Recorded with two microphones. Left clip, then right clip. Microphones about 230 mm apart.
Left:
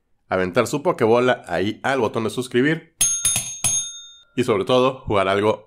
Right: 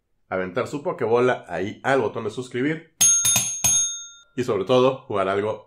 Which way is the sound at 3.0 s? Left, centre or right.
Centre.